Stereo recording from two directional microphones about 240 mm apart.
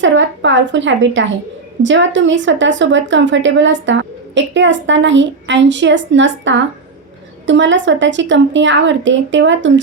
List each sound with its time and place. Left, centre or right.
0.0 s speech: right